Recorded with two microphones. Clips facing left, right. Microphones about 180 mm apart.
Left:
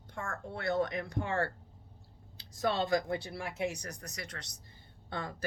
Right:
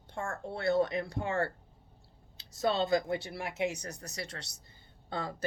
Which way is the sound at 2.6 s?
25° right (ahead or behind).